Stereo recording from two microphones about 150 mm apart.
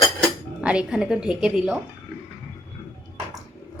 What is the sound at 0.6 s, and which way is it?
A woman's voice, 10° right (ahead or behind).